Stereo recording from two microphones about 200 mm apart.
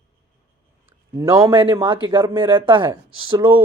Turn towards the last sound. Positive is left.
turn(degrees=-25)  # may be behind; listen again after turning